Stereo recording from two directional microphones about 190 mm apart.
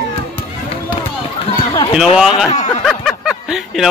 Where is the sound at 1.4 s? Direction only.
25° left (ahead or behind).